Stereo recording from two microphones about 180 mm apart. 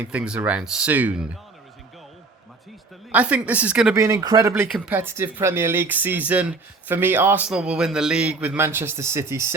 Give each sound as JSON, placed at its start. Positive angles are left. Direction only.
{"t": 0.0, "sound": "speech", "side_deg": -5}
{"t": 3.1, "sound": "speech", "side_deg": -10}
{"t": 3.9, "sound": "speech", "side_deg": -15}
{"t": 4.7, "sound": "speech", "side_deg": -10}